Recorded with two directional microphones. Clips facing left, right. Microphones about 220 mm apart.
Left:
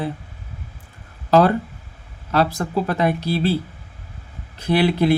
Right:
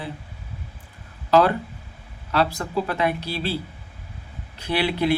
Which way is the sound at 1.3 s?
45° left (ahead or behind).